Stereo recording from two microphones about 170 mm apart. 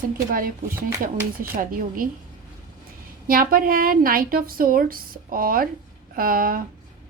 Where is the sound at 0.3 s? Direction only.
55° right (ahead or behind).